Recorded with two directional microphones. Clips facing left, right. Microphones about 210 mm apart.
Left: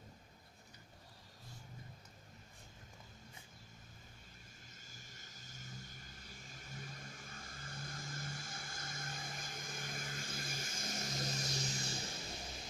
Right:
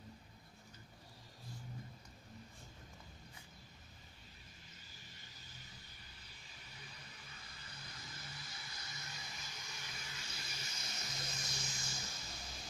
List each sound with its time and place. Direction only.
4.9 s vehicle: 45° left (ahead or behind)